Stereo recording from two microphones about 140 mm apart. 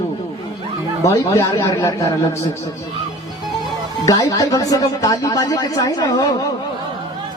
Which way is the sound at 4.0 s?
25° left (ahead or behind).